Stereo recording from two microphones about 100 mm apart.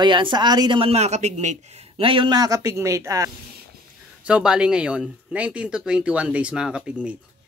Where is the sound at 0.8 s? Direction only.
90° right.